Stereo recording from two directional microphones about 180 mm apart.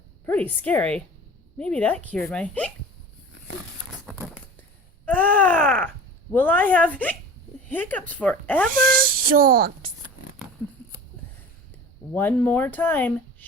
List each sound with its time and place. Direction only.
0.3 s speech: 10° left (ahead or behind)
5.0 s a sound: 10° left (ahead or behind)
6.3 s speech: 10° left (ahead or behind)
8.7 s speech: 50° right (ahead or behind)
12.1 s speech: 10° left (ahead or behind)